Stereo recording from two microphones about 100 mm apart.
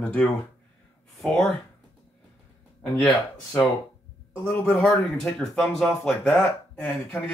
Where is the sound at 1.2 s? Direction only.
Centre (ahead or behind).